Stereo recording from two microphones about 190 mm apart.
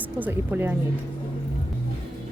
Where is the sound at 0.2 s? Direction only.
10° right (ahead or behind).